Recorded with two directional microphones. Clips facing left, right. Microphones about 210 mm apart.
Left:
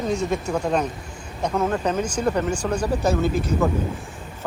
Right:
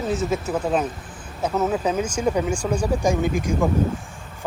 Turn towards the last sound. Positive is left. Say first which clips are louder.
# even
turn(degrees=-10)  # may be behind; listen again after turning